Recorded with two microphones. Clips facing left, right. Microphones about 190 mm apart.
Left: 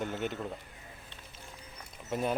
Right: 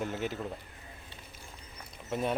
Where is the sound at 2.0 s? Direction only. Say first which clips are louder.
Even; centre (ahead or behind).